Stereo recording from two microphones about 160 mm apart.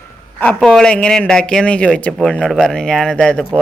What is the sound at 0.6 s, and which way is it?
Speech, centre (ahead or behind).